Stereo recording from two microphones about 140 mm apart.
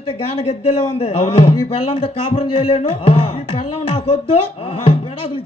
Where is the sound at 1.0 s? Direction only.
45° left (ahead or behind).